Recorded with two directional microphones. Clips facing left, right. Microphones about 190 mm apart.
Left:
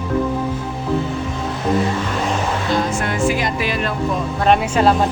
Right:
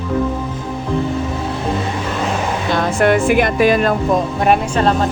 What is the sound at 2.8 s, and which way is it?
Music, 65° right (ahead or behind).